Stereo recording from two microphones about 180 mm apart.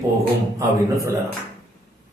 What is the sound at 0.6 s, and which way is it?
Speech, 15° right (ahead or behind).